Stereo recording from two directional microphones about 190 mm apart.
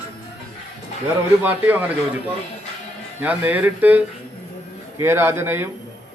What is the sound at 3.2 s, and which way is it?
A man's voice, 10° right (ahead or behind).